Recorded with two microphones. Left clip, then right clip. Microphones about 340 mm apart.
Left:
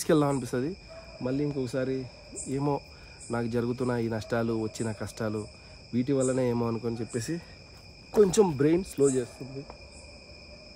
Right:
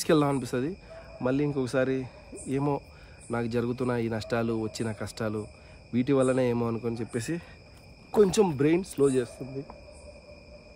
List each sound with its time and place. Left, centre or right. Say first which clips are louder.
0.0 s speech: right 1 dB; centre